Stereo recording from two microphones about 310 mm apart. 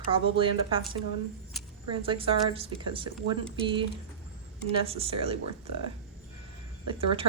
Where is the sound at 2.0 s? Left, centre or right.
Centre.